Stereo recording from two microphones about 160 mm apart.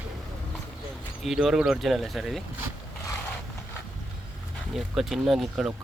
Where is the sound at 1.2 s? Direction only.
Centre (ahead or behind).